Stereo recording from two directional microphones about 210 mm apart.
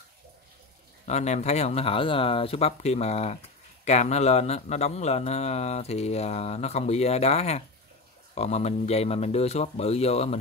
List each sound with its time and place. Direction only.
1.0 s speech: 30° left (ahead or behind)